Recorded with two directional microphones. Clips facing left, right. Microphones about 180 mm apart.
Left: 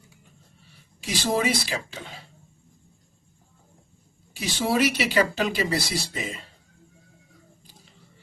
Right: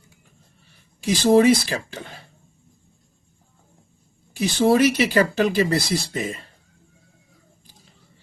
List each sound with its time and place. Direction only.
1.2 s speech: 50° right (ahead or behind)
4.4 s speech: 55° right (ahead or behind)